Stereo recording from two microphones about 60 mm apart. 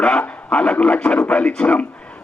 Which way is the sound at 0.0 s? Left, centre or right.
Centre.